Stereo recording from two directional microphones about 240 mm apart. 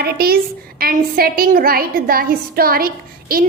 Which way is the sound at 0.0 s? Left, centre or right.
Right.